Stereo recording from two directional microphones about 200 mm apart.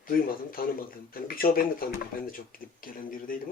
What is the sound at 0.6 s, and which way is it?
Speech, 50° left (ahead or behind).